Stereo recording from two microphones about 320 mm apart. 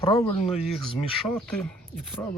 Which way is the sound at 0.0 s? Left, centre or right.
Centre.